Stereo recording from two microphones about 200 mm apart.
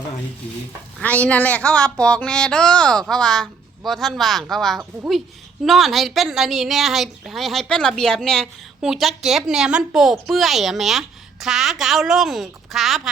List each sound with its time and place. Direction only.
0.9 s a woman's voice: 5° left (ahead or behind)